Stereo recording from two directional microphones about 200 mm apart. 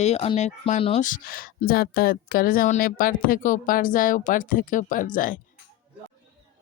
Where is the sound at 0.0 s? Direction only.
30° left (ahead or behind).